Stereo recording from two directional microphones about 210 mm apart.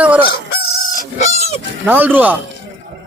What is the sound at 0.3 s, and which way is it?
Fowl, 50° left (ahead or behind).